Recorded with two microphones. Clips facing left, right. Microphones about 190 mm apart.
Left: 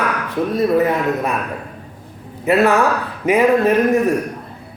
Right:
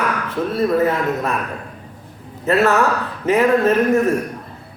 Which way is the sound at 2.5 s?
15° left (ahead or behind).